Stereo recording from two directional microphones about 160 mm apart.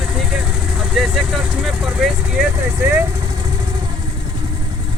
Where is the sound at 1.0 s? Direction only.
Centre (ahead or behind).